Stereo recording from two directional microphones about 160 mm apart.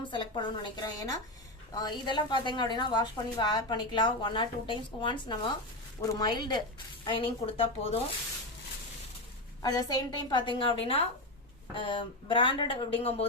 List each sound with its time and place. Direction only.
0.1 s a woman's voice: 30° left (ahead or behind)
9.6 s a woman's voice: 25° left (ahead or behind); by 13.2 s 40° left (ahead or behind)